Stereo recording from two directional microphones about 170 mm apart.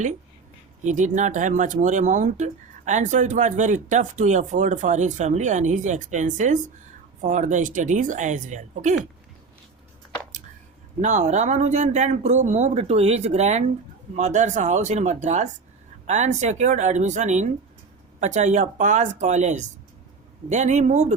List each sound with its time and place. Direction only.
0.9 s speech: 45° right (ahead or behind)
11.0 s speech: 45° right (ahead or behind)